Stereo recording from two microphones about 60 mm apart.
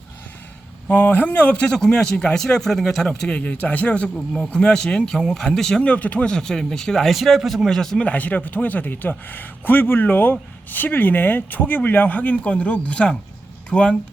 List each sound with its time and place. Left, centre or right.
0.9 s a man's voice: left
5.8 s speech: left
6.3 s a man's voice: centre
8.0 s speech: left